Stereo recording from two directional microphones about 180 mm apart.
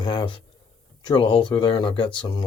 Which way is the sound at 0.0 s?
25° left (ahead or behind).